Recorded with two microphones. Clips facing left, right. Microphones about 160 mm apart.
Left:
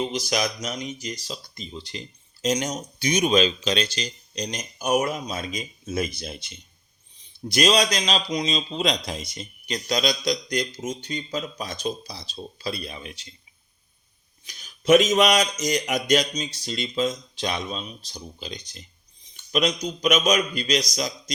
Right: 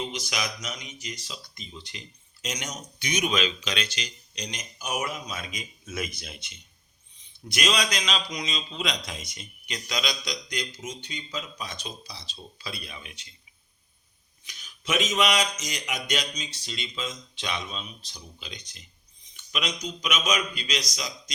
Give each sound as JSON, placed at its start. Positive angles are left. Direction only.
{"t": 0.0, "sound": "speech", "side_deg": 35}
{"t": 14.4, "sound": "speech", "side_deg": 40}